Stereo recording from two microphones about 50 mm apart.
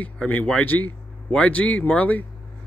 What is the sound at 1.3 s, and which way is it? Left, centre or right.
Speech, left.